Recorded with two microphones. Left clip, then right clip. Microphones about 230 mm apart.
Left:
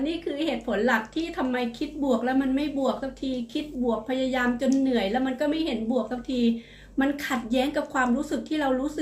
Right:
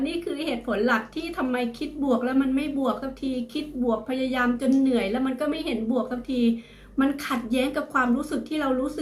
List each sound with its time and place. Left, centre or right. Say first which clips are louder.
0.0 s speech: even; centre
2.0 s speech: right 1 dB; centre